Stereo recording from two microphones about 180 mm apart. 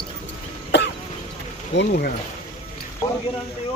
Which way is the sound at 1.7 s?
75° left (ahead or behind).